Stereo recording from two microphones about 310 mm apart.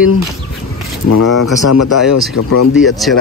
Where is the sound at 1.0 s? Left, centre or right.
Left.